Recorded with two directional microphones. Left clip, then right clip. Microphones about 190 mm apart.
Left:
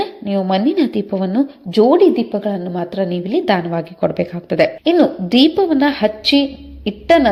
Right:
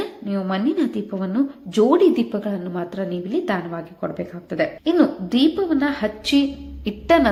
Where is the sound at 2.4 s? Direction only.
20° left (ahead or behind).